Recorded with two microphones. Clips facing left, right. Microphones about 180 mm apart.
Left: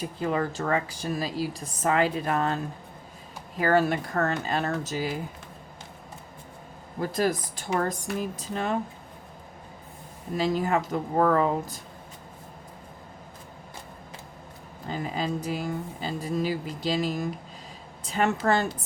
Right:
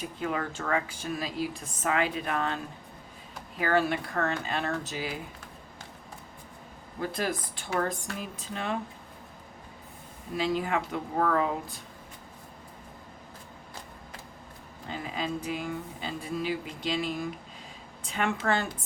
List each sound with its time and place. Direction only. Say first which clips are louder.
0.0 s a woman's voice: left 4 dB; 35° left (ahead or behind)
3.6 s a woman's voice: left 4 dB; 40° left (ahead or behind)
7.0 s a woman's voice: left 5 dB; 40° left (ahead or behind)
10.3 s a woman's voice: left 3 dB; 40° left (ahead or behind)
14.8 s a woman's voice: left 4 dB; 40° left (ahead or behind)